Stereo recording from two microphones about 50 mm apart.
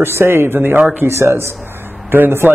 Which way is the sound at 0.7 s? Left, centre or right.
Right.